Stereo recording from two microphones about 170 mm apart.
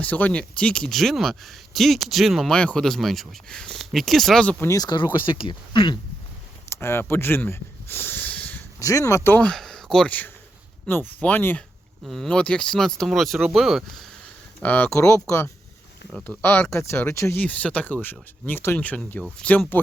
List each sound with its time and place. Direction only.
0.0 s speech: 10° left (ahead or behind)
4.7 s speech: 25° left (ahead or behind)
6.7 s speech: 15° left (ahead or behind)
8.8 s speech: 20° left (ahead or behind)
16.1 s speech: 5° left (ahead or behind)